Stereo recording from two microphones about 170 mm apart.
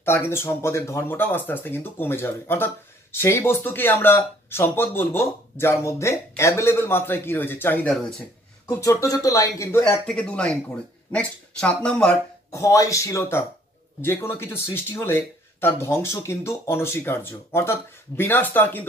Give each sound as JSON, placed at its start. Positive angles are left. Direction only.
{"t": 0.0, "sound": "speech", "side_deg": 15}
{"t": 8.6, "sound": "speech", "side_deg": 15}
{"t": 12.4, "sound": "speech", "side_deg": 20}